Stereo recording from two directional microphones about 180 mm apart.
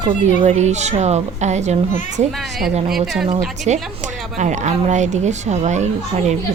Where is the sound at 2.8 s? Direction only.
Centre (ahead or behind).